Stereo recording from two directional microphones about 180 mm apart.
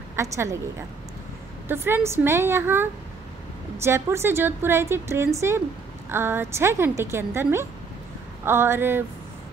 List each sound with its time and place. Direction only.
0.1 s a woman's voice: 15° right (ahead or behind)
1.7 s a woman's voice: 10° right (ahead or behind)